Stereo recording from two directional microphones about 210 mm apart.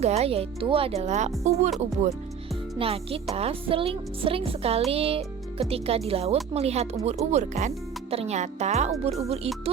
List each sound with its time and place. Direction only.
0.0 s speech: 30° right (ahead or behind)
2.7 s a woman's voice: 25° right (ahead or behind)